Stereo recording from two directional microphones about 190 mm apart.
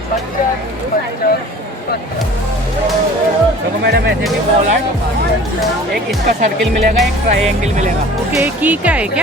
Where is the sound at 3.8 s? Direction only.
65° right (ahead or behind).